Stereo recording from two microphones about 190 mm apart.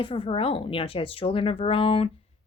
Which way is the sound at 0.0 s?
30° left (ahead or behind).